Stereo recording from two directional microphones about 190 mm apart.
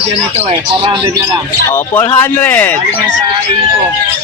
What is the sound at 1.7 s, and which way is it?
Speech, 15° left (ahead or behind).